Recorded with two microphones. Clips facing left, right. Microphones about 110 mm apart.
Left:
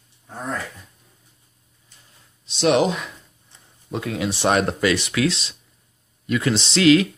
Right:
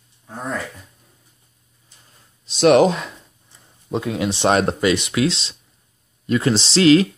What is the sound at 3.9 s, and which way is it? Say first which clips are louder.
Speech: right 3 dB; 20° right (ahead or behind).